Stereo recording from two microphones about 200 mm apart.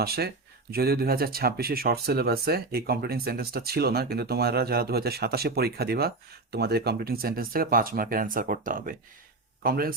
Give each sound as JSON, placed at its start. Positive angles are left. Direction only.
{"t": 0.0, "sound": "speech", "side_deg": -50}